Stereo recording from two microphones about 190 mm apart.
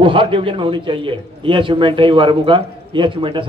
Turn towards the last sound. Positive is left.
turn(degrees=-25)  # may be behind; listen again after turning